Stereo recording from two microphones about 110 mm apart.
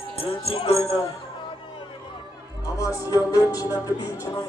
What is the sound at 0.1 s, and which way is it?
Music, 60° left (ahead or behind).